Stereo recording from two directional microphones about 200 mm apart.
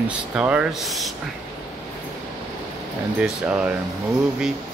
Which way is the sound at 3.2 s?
5° right (ahead or behind).